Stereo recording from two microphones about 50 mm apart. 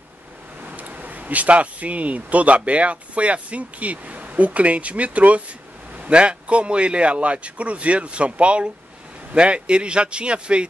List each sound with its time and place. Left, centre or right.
0.7 s a man's voice: right